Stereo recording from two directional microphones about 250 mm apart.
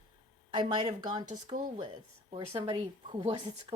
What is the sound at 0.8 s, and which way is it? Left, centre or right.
A woman's voice, right.